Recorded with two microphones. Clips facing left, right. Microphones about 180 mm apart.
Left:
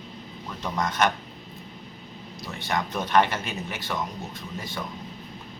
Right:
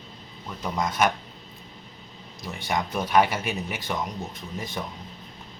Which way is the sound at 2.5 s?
15° right (ahead or behind).